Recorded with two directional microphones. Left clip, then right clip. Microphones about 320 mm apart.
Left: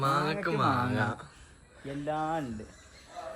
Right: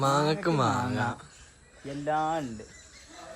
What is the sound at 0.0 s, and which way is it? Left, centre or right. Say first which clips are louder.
Speech: right 3 dB; centre.